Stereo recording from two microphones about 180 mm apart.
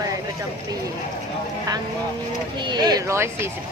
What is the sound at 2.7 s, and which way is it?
Speech, 25° right (ahead or behind).